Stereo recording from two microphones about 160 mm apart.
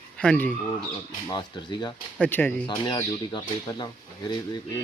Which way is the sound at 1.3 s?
30° left (ahead or behind).